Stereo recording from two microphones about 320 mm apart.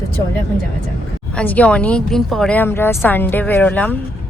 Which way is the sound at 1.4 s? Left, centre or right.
Centre.